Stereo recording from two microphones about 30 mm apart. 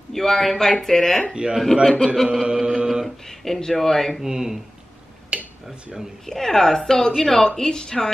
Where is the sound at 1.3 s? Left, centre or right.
Right.